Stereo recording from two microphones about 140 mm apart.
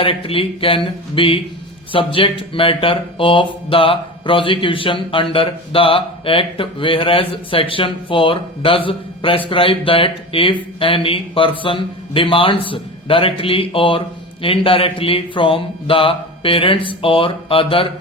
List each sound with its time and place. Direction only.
0.0 s speech: 40° left (ahead or behind)